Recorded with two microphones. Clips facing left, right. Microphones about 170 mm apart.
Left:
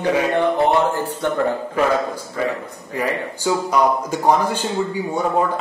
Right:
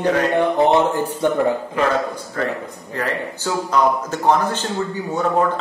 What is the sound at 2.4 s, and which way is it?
A man's voice, 10° left (ahead or behind).